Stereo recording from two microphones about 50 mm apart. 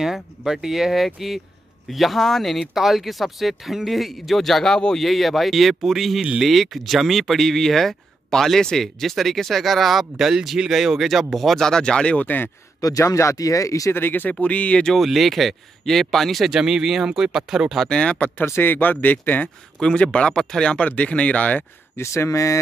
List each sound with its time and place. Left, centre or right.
0.5 s speech: centre
5.0 s speech: centre; by 12.3 s left
13.0 s speech: left
13.9 s speech: left
14.4 s speech: left
15.0 s speech: centre
16.4 s speech: centre
17.8 s speech: centre
18.4 s speech: left
19.8 s speech: centre
21.9 s speech: left